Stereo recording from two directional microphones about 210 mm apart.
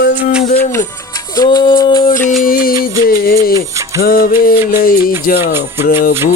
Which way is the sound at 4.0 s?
45° left (ahead or behind).